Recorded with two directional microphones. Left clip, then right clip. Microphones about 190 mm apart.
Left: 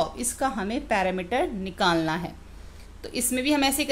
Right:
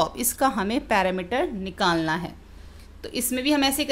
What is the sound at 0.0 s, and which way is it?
A woman's voice, 30° right (ahead or behind).